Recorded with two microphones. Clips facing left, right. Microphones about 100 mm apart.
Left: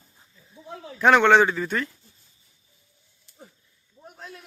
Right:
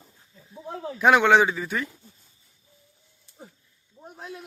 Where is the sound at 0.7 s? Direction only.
40° right (ahead or behind).